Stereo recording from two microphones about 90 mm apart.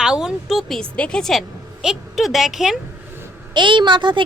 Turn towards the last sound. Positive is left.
turn(degrees=-65)  # may be behind; listen again after turning